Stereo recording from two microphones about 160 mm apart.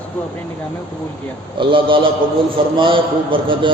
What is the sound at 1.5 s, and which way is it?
A man's voice, 35° right (ahead or behind).